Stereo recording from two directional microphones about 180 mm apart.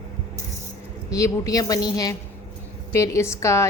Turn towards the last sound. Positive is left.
turn(degrees=15)  # may be behind; listen again after turning